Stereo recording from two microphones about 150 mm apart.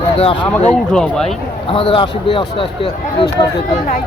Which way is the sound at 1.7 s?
35° left (ahead or behind).